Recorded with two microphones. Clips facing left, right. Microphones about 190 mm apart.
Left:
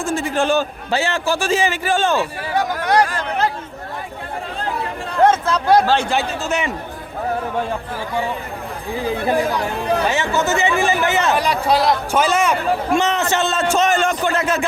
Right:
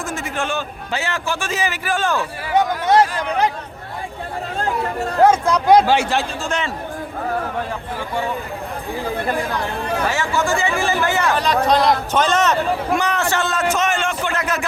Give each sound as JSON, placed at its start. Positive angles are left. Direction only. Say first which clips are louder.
{"t": 0.0, "sound": "a man's voice", "louder": "left 5 dB", "side_deg": 30}
{"t": 2.6, "sound": "speech", "louder": "right 2 dB", "side_deg": -25}
{"t": 4.6, "sound": "chatter", "louder": "right 5 dB", "side_deg": -45}
{"t": 5.2, "sound": "a man's voice", "louder": "right 1 dB", "side_deg": -10}
{"t": 6.1, "sound": "a man's voice", "louder": "left 1 dB", "side_deg": 5}
{"t": 10.1, "sound": "a man's voice", "louder": "left 1 dB", "side_deg": 20}
{"t": 11.3, "sound": "a man's voice", "louder": "right 1 dB", "side_deg": 10}
{"t": 12.9, "sound": "a man's voice", "louder": "left 2 dB", "side_deg": 25}